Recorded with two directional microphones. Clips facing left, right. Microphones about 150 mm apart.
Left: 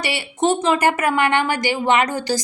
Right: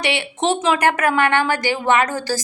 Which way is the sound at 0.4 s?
5° left (ahead or behind).